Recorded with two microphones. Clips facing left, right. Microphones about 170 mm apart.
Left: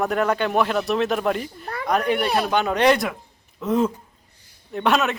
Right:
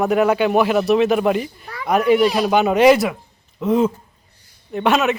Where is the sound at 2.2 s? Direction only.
60° left (ahead or behind).